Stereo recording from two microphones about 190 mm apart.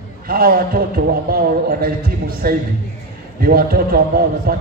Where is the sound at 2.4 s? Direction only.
50° right (ahead or behind).